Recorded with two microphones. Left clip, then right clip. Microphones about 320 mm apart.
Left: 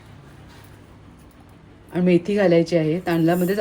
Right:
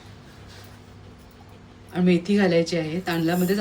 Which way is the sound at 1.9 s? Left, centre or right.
Centre.